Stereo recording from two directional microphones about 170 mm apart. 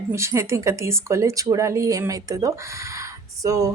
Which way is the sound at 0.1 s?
15° right (ahead or behind).